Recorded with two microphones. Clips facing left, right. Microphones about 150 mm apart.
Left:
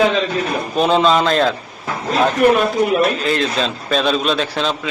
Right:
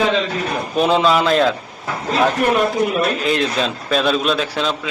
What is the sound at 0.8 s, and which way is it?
Speech, 10° right (ahead or behind).